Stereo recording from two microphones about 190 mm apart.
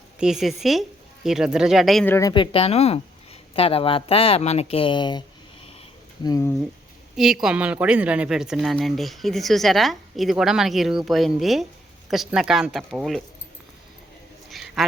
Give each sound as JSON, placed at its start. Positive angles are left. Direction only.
{"t": 0.2, "sound": "speech", "side_deg": 0}
{"t": 2.1, "sound": "speech", "side_deg": 20}
{"t": 6.2, "sound": "speech", "side_deg": 20}
{"t": 7.4, "sound": "speech", "side_deg": -5}
{"t": 14.5, "sound": "a sound", "side_deg": 0}